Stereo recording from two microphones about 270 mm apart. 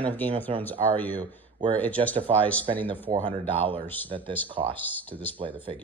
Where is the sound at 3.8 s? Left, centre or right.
Centre.